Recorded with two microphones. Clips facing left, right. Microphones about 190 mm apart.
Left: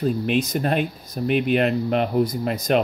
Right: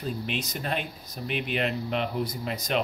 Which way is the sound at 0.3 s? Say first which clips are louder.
Left 10 dB; 50° left (ahead or behind).